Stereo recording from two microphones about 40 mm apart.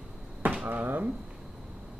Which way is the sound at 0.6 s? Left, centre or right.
Right.